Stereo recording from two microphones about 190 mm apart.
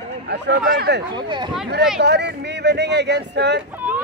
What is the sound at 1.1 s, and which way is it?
Speech, 25° right (ahead or behind).